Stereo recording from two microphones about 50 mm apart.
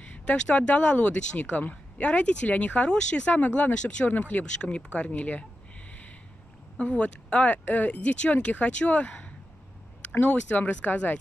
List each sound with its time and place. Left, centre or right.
0.0 s speech: left
3.7 s speech: left
4.1 s speech: left
4.6 s speech: left
5.9 s a sound: left
6.8 s speech: left